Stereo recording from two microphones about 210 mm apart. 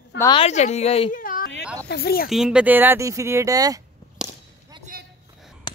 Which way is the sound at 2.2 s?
Centre (ahead or behind).